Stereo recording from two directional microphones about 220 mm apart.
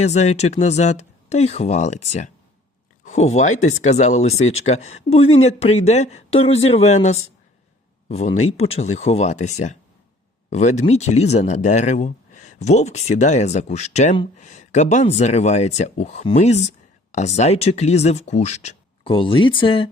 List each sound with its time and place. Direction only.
0.0 s speech: 30° left (ahead or behind)